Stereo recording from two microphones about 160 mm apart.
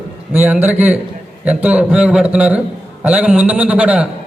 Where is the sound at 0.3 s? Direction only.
10° right (ahead or behind).